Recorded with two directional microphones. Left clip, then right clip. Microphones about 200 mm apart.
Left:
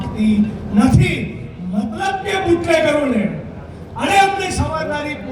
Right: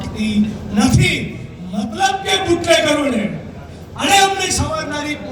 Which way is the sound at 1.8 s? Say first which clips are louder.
Right 3 dB; 50° left (ahead or behind).